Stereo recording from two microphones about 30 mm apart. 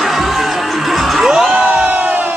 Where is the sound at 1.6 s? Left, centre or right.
Right.